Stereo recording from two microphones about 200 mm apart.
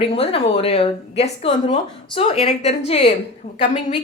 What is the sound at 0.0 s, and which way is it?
A woman's voice, 30° left (ahead or behind).